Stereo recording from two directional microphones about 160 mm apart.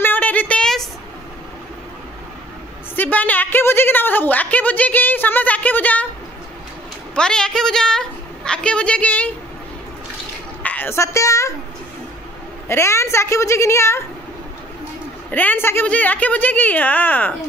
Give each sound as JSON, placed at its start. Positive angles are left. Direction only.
{"t": 0.0, "sound": "a sound", "side_deg": 10}
{"t": 3.0, "sound": "a woman's voice", "side_deg": 10}
{"t": 7.2, "sound": "a woman's voice", "side_deg": 5}
{"t": 10.6, "sound": "a woman's voice", "side_deg": 10}
{"t": 12.6, "sound": "speech", "side_deg": 15}
{"t": 15.3, "sound": "speech", "side_deg": 10}